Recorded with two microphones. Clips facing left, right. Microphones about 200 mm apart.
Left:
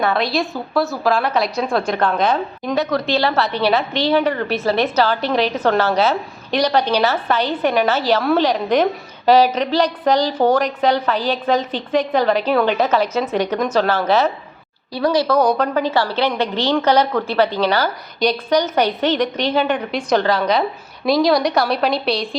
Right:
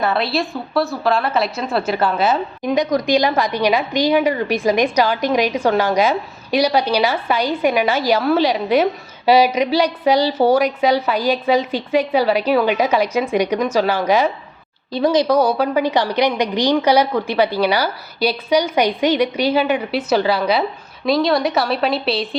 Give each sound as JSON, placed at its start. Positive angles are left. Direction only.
{"t": 0.0, "sound": "a woman's voice", "side_deg": 0}